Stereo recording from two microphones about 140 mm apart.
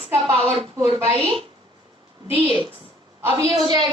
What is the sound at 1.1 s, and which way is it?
Speech, 40° right (ahead or behind).